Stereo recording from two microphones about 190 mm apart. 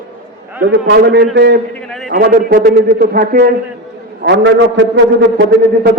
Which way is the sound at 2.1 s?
50° right (ahead or behind).